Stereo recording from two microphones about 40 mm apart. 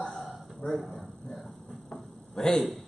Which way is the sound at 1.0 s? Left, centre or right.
Centre.